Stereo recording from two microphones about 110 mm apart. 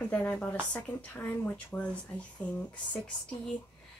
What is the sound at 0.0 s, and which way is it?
Speech, 15° left (ahead or behind).